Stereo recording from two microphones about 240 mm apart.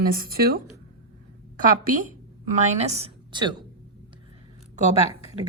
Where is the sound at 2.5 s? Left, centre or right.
Right.